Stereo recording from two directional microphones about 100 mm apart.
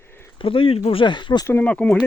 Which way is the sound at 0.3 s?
65° left (ahead or behind).